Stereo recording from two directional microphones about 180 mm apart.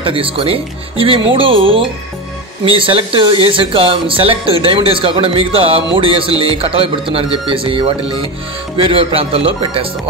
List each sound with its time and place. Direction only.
0.0 s speech: 30° right (ahead or behind)